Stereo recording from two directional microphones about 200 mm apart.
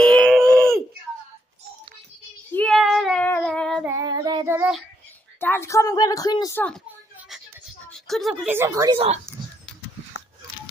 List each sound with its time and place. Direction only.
0.0 s a sound: 5° left (ahead or behind)
2.5 s child singing: 5° left (ahead or behind)
3.8 s child singing: 15° right (ahead or behind)
4.5 s child singing: 10° right (ahead or behind)
5.4 s a woman's voice: 10° left (ahead or behind)
7.9 s a woman's voice: centre (ahead or behind)
8.6 s a woman's voice: 20° right (ahead or behind)